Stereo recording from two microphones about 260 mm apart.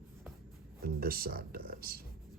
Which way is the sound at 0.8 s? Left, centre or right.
Right.